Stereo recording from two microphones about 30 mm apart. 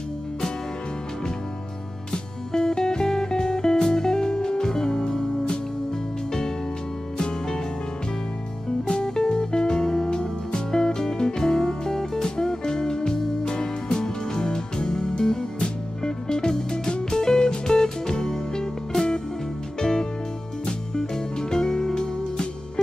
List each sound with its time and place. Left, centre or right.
2.5 s music: centre
7.2 s music: left
8.8 s music: left
19.8 s music: centre